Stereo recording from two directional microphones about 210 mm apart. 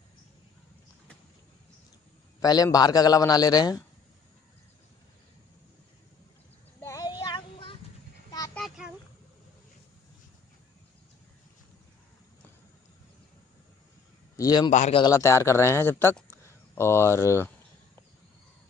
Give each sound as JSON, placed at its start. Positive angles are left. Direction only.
{"t": 2.4, "sound": "speech", "side_deg": 20}
{"t": 6.8, "sound": "child singing", "side_deg": 15}
{"t": 8.5, "sound": "a sound", "side_deg": 0}
{"t": 14.3, "sound": "a sound", "side_deg": 20}
{"t": 14.7, "sound": "speech", "side_deg": 35}
{"t": 15.0, "sound": "speech", "side_deg": 15}